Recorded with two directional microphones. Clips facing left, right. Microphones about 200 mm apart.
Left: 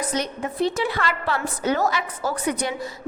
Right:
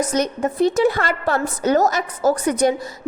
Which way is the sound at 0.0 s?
45° right (ahead or behind).